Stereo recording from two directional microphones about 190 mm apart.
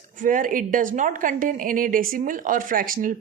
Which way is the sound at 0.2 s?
45° right (ahead or behind).